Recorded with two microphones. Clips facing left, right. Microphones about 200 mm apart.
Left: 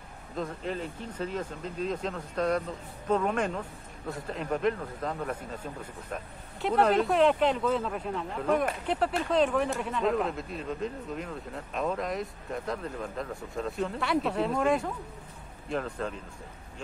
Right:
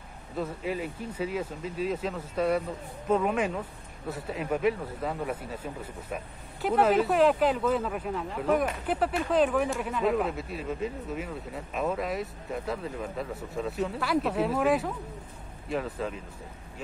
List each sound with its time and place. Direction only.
0.4 s speech: 5° right (ahead or behind)